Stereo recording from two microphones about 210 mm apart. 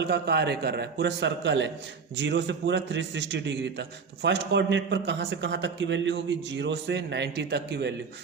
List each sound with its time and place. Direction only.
0.0 s a man's voice: 50° right (ahead or behind)